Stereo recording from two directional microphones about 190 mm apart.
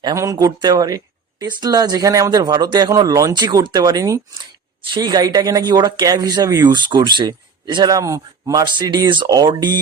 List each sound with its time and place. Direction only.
0.0 s speech: 15° right (ahead or behind)